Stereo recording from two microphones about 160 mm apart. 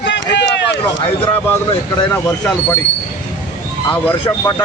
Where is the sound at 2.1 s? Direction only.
15° left (ahead or behind).